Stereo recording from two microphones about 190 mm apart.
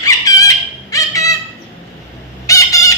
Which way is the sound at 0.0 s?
20° left (ahead or behind).